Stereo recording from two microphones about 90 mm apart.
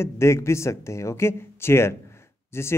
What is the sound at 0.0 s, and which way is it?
Speech, 30° left (ahead or behind).